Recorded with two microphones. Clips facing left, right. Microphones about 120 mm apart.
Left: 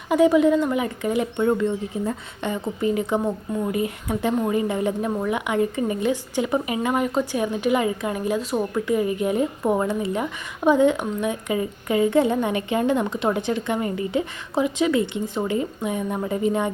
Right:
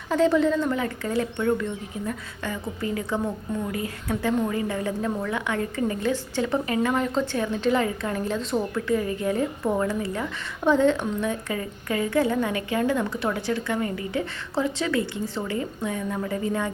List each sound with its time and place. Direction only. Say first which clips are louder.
0.1 s a woman's voice: left 4 dB; 15° left (ahead or behind)